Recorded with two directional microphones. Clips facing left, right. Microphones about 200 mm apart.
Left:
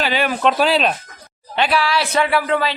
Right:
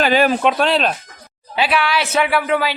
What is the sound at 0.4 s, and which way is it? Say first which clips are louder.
Speech: even; centre (ahead or behind).